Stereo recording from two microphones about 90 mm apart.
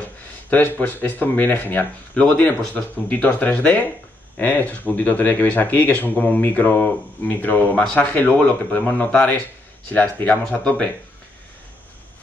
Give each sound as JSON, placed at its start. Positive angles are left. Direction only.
{"t": 0.5, "sound": "speech", "side_deg": 20}